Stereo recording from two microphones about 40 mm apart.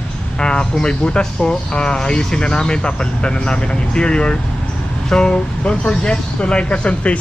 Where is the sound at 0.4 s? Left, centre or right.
Left.